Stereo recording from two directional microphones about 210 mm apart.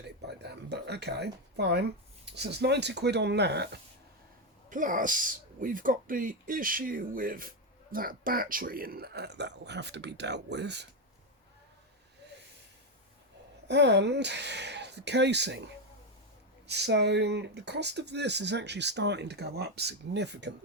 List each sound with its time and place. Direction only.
0.0 s speech: 55° right (ahead or behind)
4.7 s speech: 40° right (ahead or behind); by 10.8 s 55° right (ahead or behind)
13.7 s speech: 55° right (ahead or behind)
16.6 s speech: 55° right (ahead or behind)